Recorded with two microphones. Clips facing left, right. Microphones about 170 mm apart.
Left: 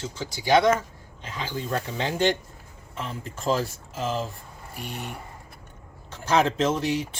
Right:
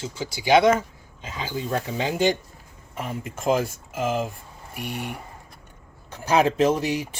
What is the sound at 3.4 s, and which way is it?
Speech, 50° right (ahead or behind).